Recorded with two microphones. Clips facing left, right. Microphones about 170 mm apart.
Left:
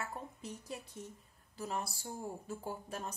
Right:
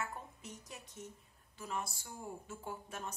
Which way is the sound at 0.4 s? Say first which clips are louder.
Left 6 dB; 30° left (ahead or behind).